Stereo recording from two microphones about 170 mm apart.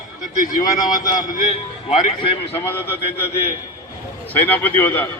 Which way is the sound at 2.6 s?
15° left (ahead or behind).